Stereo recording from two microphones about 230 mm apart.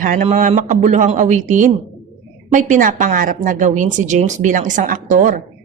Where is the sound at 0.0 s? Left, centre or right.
Right.